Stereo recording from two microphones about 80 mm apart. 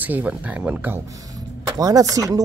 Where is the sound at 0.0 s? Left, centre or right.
Right.